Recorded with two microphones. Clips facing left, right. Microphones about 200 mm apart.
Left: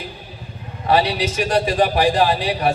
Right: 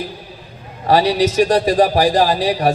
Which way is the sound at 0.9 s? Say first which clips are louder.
Right 4 dB; 40° right (ahead or behind).